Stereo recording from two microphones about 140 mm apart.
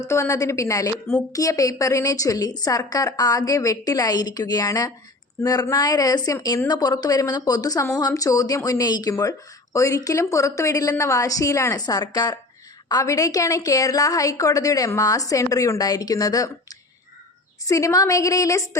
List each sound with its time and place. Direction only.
0.1 s a woman's voice: 20° left (ahead or behind)